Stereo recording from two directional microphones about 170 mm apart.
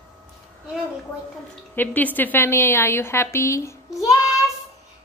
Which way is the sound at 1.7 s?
10° left (ahead or behind).